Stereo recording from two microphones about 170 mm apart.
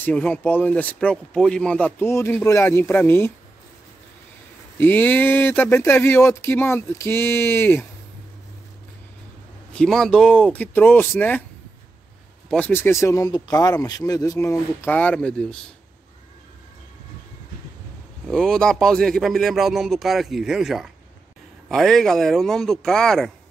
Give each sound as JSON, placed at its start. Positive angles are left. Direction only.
{"t": 0.0, "sound": "speech", "side_deg": 10}
{"t": 4.7, "sound": "speech", "side_deg": 10}
{"t": 9.7, "sound": "speech", "side_deg": 5}
{"t": 12.4, "sound": "speech", "side_deg": 10}
{"t": 18.2, "sound": "speech", "side_deg": 5}